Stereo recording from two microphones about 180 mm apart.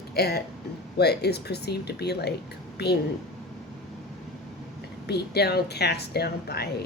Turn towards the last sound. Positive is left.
turn(degrees=60)  # may be behind; listen again after turning